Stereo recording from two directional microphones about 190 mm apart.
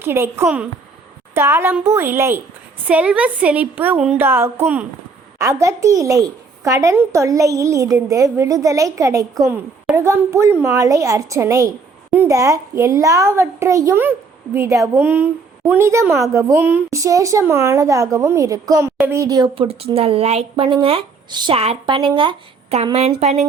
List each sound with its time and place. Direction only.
0.0 s a child's voice: 10° right (ahead or behind); by 23.5 s 35° right (ahead or behind)